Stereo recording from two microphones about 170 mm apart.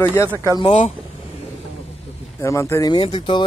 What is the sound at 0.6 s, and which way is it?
Speech, 35° left (ahead or behind).